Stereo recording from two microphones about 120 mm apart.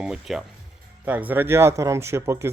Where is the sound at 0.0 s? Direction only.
5° right (ahead or behind).